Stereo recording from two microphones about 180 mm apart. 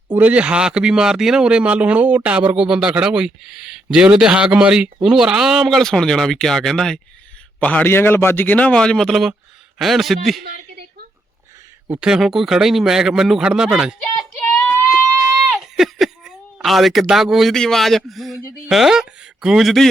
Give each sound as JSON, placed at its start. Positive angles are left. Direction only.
{"t": 0.1, "sound": "a man's voice", "side_deg": -10}
{"t": 10.4, "sound": "a sound", "side_deg": -60}
{"t": 11.9, "sound": "speech", "side_deg": -5}
{"t": 14.3, "sound": "child singing", "side_deg": 10}
{"t": 15.2, "sound": "a sound", "side_deg": 0}
{"t": 18.3, "sound": "a man's voice", "side_deg": 15}
{"t": 18.7, "sound": "speech", "side_deg": 0}